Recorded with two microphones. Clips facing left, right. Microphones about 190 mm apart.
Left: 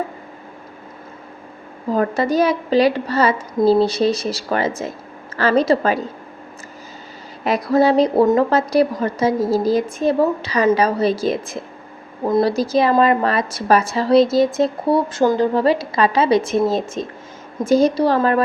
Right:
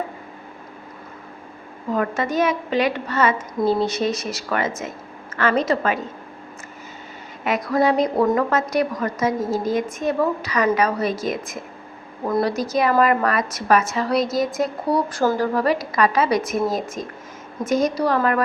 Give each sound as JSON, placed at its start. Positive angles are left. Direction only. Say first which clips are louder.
{"t": 1.9, "sound": "a woman's voice", "louder": "left 4 dB", "side_deg": 35}
{"t": 7.4, "sound": "a woman's voice", "louder": "left 4 dB", "side_deg": 35}